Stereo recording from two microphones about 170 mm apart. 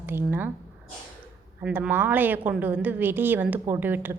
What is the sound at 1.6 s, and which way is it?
A woman's voice, 10° right (ahead or behind).